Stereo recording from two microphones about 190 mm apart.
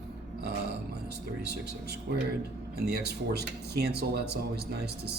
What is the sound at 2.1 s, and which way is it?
Speech, 60° right (ahead or behind).